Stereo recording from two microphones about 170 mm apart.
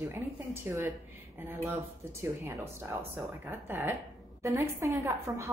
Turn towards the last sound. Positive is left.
turn(degrees=-20)  # may be behind; listen again after turning